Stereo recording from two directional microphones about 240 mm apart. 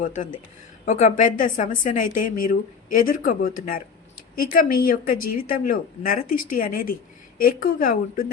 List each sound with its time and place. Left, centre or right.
0.0 s a woman's voice: left
5.1 s speech: left
5.5 s a woman's voice: left
6.2 s speech: left
6.5 s a woman's voice: left